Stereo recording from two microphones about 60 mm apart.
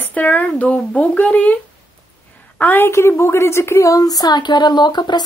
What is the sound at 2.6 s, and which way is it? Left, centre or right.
A woman's voice, left.